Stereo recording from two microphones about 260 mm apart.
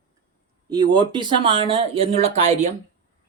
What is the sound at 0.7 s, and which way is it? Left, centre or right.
Speech, centre.